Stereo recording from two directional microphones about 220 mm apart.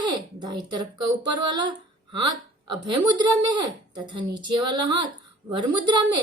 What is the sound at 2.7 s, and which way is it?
A woman's voice, 20° right (ahead or behind).